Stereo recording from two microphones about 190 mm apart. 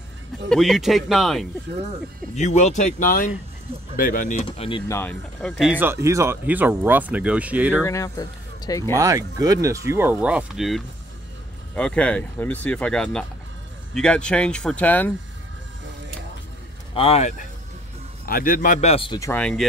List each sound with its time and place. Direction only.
0.5 s speech: centre (ahead or behind)
2.3 s a man's voice: 40° left (ahead or behind)
4.4 s speech: 30° left (ahead or behind)
4.8 s speech: 10° left (ahead or behind)
5.6 s speech: 10° right (ahead or behind)
7.8 s speech: 15° left (ahead or behind)
8.9 s speech: 20° right (ahead or behind); by 15.1 s 10° left (ahead or behind)
16.9 s speech: 30° left (ahead or behind)
18.2 s a man's voice: 50° left (ahead or behind); by 19.1 s 30° left (ahead or behind)
19.1 s speech: 15° left (ahead or behind)